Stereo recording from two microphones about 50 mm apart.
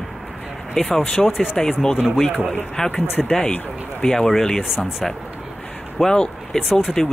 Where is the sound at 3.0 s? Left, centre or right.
Left.